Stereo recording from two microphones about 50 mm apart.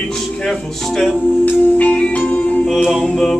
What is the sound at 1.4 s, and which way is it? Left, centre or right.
Music, left.